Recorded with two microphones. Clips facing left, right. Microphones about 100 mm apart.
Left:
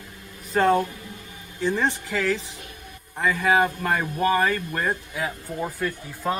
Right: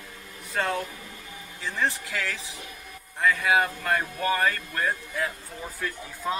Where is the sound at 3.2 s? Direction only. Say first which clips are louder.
Left 2 dB; 5° left (ahead or behind).